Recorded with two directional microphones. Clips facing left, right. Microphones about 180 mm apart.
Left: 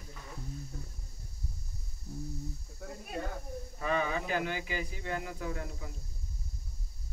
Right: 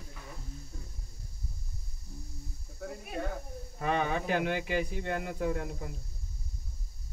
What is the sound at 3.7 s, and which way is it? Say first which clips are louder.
A man's voice: right 2 dB; 60° right (ahead or behind).